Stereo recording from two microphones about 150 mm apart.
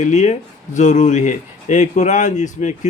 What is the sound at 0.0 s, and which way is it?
Speech, 50° left (ahead or behind).